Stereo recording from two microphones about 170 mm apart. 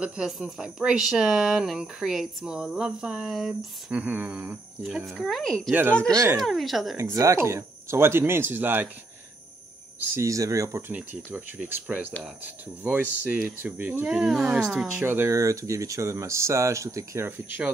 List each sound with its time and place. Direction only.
0.0 s speech: 5° right (ahead or behind)
6.1 s speech: 20° right (ahead or behind)
6.4 s speech: centre (ahead or behind)
7.0 s speech: 15° right (ahead or behind)
10.1 s speech: 20° right (ahead or behind)